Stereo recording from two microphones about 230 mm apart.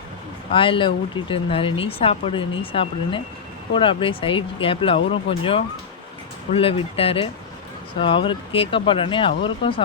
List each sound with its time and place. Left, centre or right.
0.5 s speech: left